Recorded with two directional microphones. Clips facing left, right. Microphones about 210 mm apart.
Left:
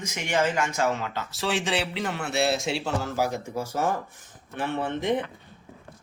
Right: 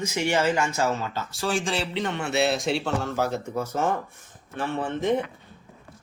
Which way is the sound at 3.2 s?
15° left (ahead or behind).